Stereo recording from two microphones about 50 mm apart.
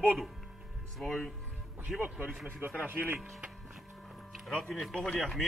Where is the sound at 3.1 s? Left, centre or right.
Right.